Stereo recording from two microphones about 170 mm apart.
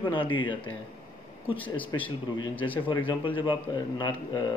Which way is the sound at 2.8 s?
30° left (ahead or behind).